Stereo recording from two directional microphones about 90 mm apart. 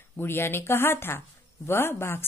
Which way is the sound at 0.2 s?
25° left (ahead or behind).